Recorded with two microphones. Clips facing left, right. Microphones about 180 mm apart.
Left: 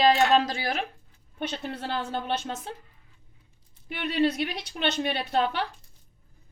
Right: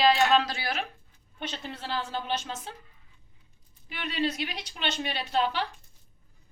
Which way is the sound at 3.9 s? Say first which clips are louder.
Left 5 dB; 55° left (ahead or behind).